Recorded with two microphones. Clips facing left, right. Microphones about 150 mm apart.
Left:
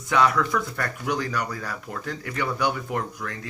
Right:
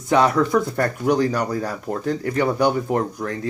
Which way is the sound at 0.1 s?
35° right (ahead or behind).